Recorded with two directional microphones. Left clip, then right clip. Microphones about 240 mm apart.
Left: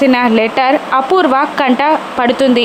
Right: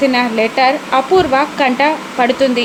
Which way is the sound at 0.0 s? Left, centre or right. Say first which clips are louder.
Left 3 dB; left.